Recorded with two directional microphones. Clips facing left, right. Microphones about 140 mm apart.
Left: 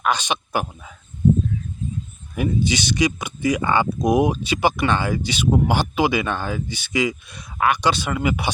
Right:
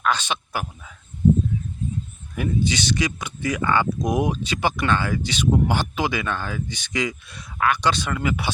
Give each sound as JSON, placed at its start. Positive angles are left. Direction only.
{"t": 0.0, "sound": "speech", "side_deg": 15}
{"t": 2.3, "sound": "speech", "side_deg": 15}